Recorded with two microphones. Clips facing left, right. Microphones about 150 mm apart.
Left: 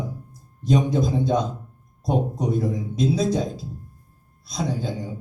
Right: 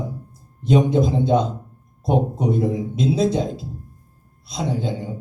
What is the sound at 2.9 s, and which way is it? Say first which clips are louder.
Speech: right 1 dB; 25° right (ahead or behind).